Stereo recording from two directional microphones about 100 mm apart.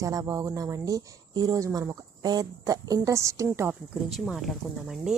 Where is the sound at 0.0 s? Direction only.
30° right (ahead or behind).